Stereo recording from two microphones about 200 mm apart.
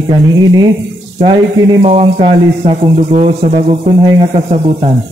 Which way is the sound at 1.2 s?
25° right (ahead or behind).